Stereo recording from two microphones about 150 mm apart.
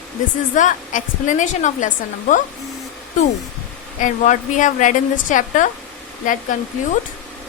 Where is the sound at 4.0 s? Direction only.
55° left (ahead or behind).